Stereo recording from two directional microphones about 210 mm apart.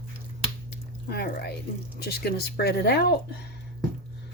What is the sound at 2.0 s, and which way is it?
Speech, 50° left (ahead or behind).